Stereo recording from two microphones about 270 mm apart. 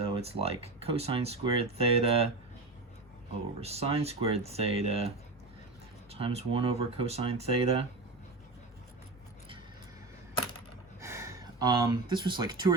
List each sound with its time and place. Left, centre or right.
0.0 s speech: right
3.6 s speech: right
11.0 s speech: centre